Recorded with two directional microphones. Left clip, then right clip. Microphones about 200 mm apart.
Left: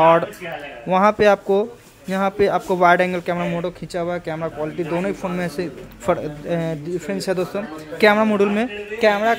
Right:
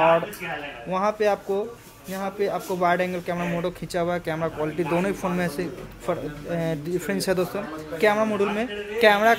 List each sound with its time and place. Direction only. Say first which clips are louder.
0.8 s speech: left 8 dB; 30° left (ahead or behind); by 5.7 s 10° left (ahead or behind)
6.0 s speech: left 7 dB; 25° left (ahead or behind)
6.7 s speech: left 2 dB; 10° left (ahead or behind)
8.0 s speech: left 6 dB; 25° left (ahead or behind)
9.0 s speech: left 1 dB; 10° left (ahead or behind)